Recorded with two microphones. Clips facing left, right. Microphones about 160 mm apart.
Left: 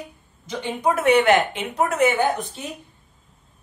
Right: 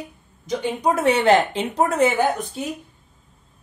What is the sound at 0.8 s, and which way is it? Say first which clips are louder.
Speech: left 2 dB; 30° right (ahead or behind).